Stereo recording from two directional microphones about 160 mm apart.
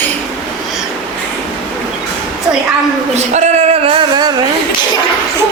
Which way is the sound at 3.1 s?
45° right (ahead or behind).